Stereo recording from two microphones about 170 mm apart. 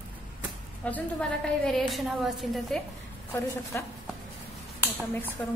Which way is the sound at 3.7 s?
10° left (ahead or behind).